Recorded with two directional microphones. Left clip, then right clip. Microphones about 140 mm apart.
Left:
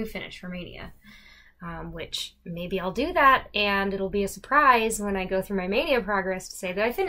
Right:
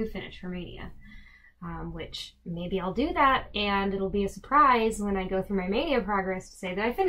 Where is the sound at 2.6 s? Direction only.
5° left (ahead or behind).